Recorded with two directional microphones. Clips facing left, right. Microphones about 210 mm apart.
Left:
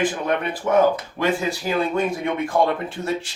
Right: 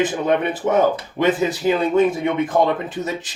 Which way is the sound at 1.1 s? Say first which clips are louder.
Right 4 dB; 20° right (ahead or behind).